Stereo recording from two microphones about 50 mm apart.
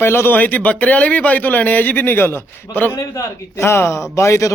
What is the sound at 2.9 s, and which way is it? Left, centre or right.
A man's voice, left.